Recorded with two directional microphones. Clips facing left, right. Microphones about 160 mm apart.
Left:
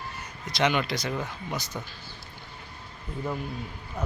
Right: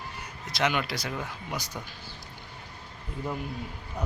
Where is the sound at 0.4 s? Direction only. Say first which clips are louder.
Left 3 dB; 5° right (ahead or behind).